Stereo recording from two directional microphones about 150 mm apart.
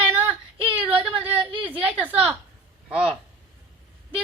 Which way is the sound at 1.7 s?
10° right (ahead or behind).